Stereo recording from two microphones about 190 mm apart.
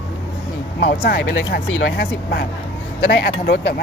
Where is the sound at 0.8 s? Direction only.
65° left (ahead or behind).